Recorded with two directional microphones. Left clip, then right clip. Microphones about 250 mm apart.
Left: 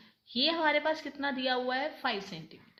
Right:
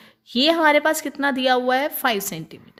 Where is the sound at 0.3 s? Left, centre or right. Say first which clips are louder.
Right 11 dB; right.